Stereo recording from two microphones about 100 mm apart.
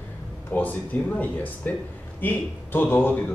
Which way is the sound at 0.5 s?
15° left (ahead or behind).